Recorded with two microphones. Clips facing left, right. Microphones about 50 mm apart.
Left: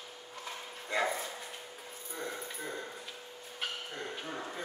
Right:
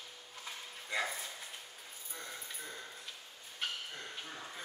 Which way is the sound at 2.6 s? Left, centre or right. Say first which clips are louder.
Left 7 dB; left.